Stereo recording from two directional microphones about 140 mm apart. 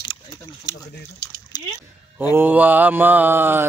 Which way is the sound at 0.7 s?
30° left (ahead or behind).